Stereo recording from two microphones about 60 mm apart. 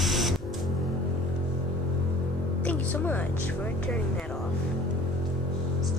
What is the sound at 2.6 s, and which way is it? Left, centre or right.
Speech, left.